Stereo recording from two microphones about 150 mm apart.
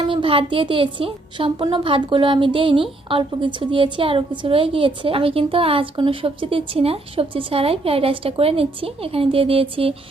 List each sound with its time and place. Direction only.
0.0 s a woman's voice: 35° right (ahead or behind)